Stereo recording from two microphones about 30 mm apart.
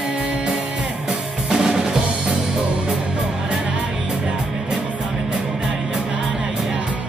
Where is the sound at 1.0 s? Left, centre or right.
Right.